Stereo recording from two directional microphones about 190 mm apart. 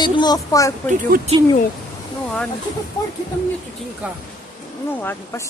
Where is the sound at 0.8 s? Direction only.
45° right (ahead or behind).